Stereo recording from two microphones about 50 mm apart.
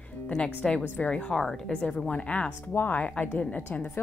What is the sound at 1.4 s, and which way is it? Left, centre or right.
A woman's voice, centre.